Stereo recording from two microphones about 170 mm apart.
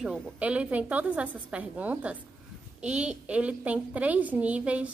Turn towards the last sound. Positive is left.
turn(degrees=-10)  # may be behind; listen again after turning